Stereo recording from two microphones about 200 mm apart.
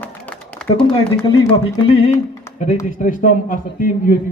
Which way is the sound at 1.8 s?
30° left (ahead or behind).